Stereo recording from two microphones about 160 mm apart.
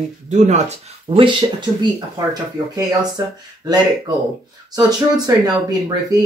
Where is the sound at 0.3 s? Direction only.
45° right (ahead or behind).